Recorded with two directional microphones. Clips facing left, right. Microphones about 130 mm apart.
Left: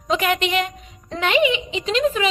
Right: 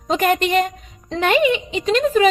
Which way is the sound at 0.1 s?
45° right (ahead or behind).